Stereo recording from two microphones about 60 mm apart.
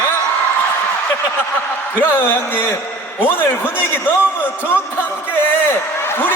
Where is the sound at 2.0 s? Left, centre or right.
Left.